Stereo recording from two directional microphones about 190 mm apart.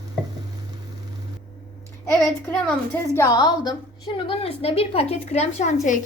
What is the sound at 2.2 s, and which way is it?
A woman's voice, 10° left (ahead or behind).